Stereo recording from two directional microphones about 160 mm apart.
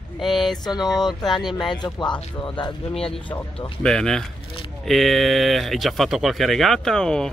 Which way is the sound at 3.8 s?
5° left (ahead or behind).